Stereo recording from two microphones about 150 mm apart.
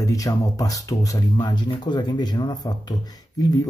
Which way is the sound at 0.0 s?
20° left (ahead or behind).